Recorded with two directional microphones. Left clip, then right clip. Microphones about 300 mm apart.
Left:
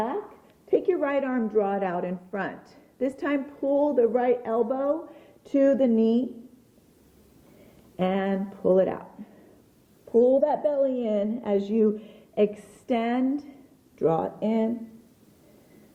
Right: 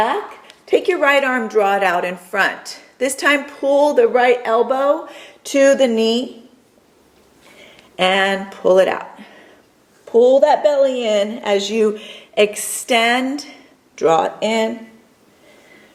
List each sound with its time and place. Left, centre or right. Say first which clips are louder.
0.0 s a woman's voice: right 12 dB; centre
7.9 s speech: right 12 dB; centre
10.1 s speech: right 9 dB; right
10.4 s speech: right 11 dB; centre